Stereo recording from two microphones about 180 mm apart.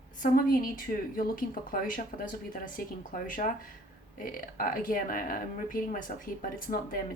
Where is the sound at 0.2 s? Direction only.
50° left (ahead or behind).